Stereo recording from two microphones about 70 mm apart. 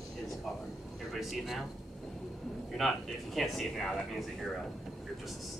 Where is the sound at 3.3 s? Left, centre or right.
Centre.